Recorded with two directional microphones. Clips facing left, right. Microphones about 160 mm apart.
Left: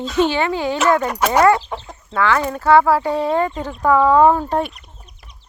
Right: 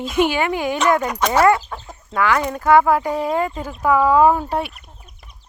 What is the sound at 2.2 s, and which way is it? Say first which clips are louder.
Speech: left 1 dB; 15° right (ahead or behind).